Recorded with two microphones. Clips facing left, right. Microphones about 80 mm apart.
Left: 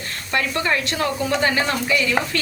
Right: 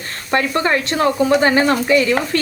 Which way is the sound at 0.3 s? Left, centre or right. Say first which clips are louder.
Right 5 dB; right.